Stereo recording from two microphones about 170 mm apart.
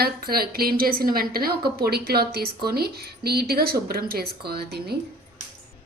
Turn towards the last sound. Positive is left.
turn(degrees=-70)  # may be behind; listen again after turning